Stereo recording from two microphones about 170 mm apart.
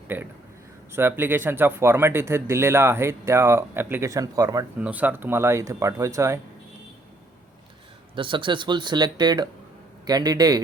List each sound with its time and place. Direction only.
0.1 s speech: 10° right (ahead or behind)
4.8 s speech: 10° right (ahead or behind)
8.1 s speech: 30° right (ahead or behind)